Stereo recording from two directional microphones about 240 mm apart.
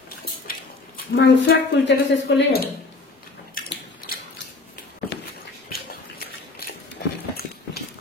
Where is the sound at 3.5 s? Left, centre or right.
Left.